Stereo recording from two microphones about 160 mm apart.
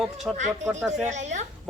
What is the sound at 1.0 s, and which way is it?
Speech, 45° right (ahead or behind).